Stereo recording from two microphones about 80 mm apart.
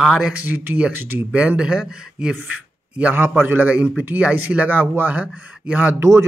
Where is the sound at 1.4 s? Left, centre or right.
Centre.